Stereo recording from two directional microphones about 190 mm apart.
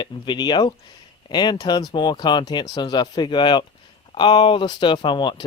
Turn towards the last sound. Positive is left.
turn(degrees=25)  # may be behind; listen again after turning